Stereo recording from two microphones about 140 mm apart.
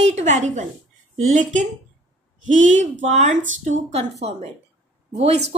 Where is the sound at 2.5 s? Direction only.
55° right (ahead or behind).